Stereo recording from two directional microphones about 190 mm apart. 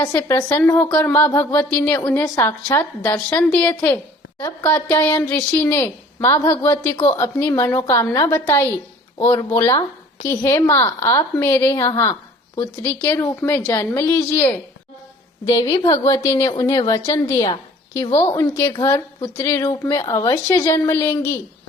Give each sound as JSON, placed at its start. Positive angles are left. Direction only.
{"t": 0.0, "sound": "a woman's voice", "side_deg": 15}